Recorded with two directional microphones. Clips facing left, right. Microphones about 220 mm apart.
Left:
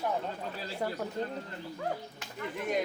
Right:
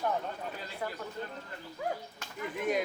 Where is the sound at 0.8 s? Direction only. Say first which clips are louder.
Left 3 dB; 30° left (ahead or behind).